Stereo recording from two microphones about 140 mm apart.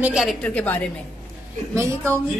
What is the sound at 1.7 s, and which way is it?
Speech, 20° right (ahead or behind).